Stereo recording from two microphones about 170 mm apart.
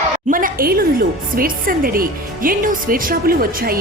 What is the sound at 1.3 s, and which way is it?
A woman's voice, 55° right (ahead or behind).